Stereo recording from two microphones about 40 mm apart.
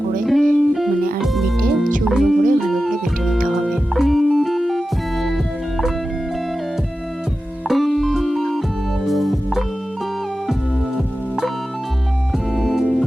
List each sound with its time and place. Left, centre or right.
0.3 s music: centre
7.7 s music: centre
12.5 s music: centre